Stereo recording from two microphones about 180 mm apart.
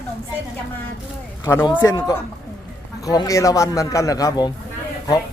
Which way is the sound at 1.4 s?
15° left (ahead or behind).